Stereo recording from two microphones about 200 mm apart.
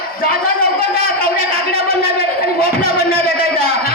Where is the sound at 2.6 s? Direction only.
50° left (ahead or behind).